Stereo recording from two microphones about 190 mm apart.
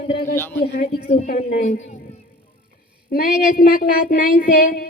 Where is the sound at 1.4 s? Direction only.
40° left (ahead or behind).